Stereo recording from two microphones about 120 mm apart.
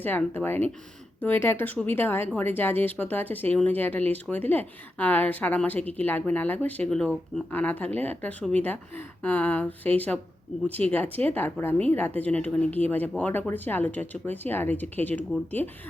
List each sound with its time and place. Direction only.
0.0 s speech: 15° left (ahead or behind)